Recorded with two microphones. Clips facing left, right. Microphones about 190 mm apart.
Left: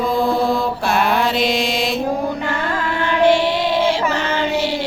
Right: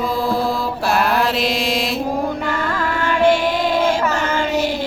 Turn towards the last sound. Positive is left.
turn(degrees=-45)  # may be behind; listen again after turning